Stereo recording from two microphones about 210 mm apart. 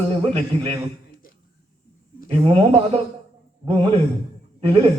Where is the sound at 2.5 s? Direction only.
30° right (ahead or behind).